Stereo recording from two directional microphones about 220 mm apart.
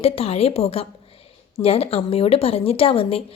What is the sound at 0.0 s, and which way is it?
A woman's voice, 25° left (ahead or behind).